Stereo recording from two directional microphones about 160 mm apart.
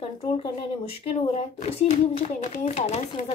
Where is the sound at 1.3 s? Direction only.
40° left (ahead or behind).